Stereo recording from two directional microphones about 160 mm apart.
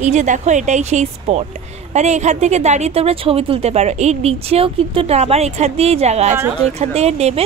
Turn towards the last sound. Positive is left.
turn(degrees=-40)  # may be behind; listen again after turning